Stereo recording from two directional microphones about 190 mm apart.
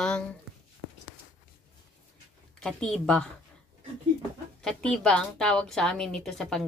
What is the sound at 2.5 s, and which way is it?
Speech, 5° left (ahead or behind).